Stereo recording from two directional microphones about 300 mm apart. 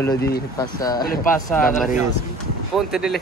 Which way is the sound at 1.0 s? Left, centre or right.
Left.